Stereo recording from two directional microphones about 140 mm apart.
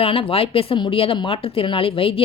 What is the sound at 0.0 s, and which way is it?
Speech, 40° left (ahead or behind).